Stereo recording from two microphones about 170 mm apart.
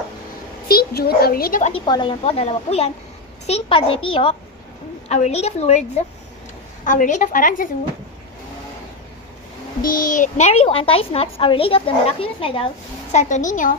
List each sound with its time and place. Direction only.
0.7 s speech: 65° left (ahead or behind)
1.9 s a child's voice: 30° left (ahead or behind); by 7.7 s 50° left (ahead or behind)
9.8 s a child's voice: 55° left (ahead or behind); by 12.6 s 30° left (ahead or behind)
13.1 s a woman's voice: 45° left (ahead or behind)